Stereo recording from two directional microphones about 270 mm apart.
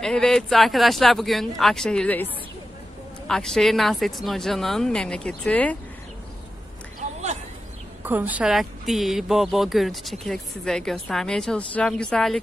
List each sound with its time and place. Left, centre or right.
0.0 s speech: centre
7.0 s a sound: right
8.0 s speech: centre